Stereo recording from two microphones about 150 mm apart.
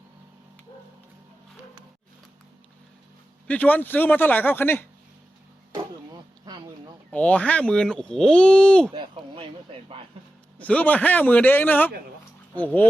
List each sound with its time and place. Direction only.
3.4 s speech: 10° left (ahead or behind)
7.1 s speech: 10° left (ahead or behind)
8.9 s a sound: 30° right (ahead or behind)
10.6 s speech: 10° left (ahead or behind)